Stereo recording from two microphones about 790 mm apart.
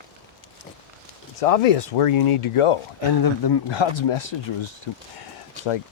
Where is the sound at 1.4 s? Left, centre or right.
Left.